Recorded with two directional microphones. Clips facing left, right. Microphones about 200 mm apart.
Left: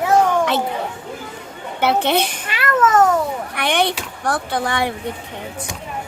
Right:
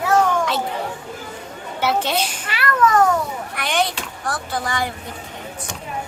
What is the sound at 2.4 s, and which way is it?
Speech, 20° left (ahead or behind).